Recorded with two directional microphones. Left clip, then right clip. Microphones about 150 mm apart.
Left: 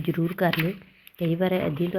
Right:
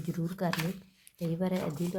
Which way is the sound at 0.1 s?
20° left (ahead or behind).